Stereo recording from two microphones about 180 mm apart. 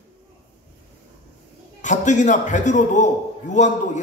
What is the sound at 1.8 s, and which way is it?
A man's voice, 45° left (ahead or behind).